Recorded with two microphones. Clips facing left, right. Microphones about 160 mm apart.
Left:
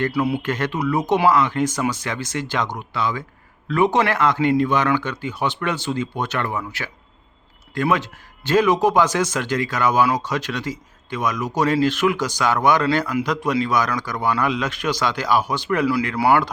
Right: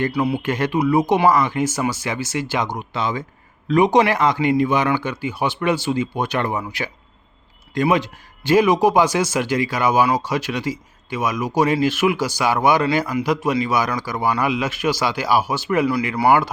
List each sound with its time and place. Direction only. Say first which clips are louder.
0.1 s speech: even; centre (ahead or behind)
0.4 s speech: right 3 dB; 10° right (ahead or behind)
2.9 s speech: right 1 dB; 20° right (ahead or behind)